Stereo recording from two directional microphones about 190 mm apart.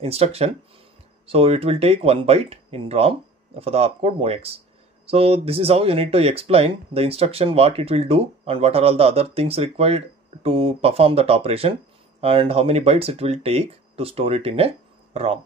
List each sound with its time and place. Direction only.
0.0 s speech: 30° right (ahead or behind)